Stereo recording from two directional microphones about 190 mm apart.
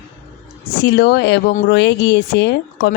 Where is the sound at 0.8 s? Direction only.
60° left (ahead or behind).